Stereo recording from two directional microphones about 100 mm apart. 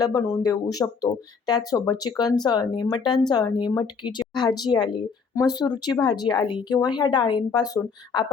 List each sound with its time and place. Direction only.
0.0 s speech: 35° left (ahead or behind)